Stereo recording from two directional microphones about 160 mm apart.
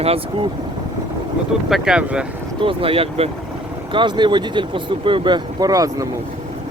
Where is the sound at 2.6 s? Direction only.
35° right (ahead or behind).